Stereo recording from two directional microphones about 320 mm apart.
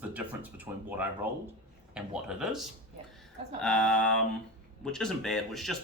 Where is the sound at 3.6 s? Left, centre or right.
Centre.